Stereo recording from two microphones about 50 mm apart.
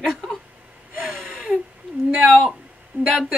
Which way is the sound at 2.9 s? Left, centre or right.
Right.